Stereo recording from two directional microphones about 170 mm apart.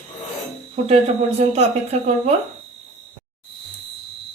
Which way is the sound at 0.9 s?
40° right (ahead or behind).